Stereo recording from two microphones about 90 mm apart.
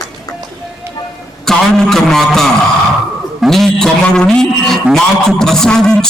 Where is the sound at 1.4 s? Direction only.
5° left (ahead or behind).